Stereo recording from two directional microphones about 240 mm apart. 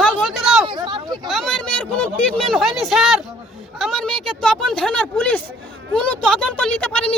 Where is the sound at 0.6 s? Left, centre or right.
Centre.